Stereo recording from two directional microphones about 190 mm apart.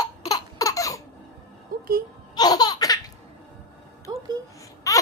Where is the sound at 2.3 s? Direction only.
20° left (ahead or behind).